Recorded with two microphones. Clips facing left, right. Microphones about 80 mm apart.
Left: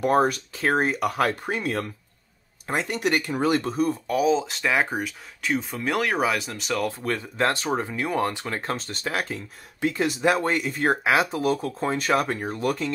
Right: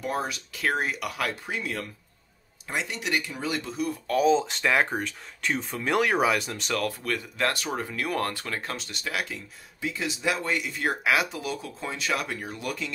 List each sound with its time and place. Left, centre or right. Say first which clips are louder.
0.0 s speech: left 10 dB; left
0.6 s speech: left 4 dB; left
4.1 s speech: right 3 dB; centre
6.9 s speech: left 3 dB; left
9.8 s speech: left 7 dB; left